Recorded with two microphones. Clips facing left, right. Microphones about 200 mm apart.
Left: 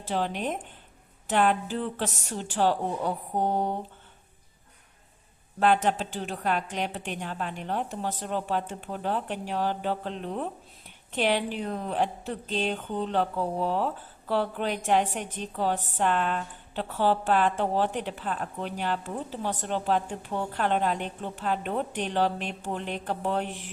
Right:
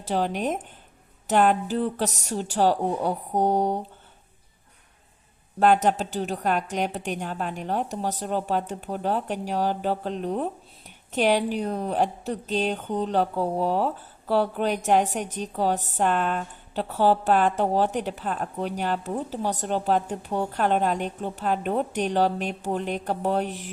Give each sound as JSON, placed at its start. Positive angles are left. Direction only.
{"t": 0.0, "sound": "a woman's voice", "side_deg": -40}
{"t": 5.5, "sound": "a woman's voice", "side_deg": -45}